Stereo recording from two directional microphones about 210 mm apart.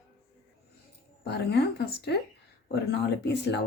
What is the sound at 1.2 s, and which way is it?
Speech, 50° left (ahead or behind).